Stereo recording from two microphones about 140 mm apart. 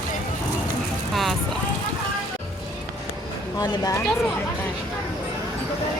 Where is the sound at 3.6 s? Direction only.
30° left (ahead or behind).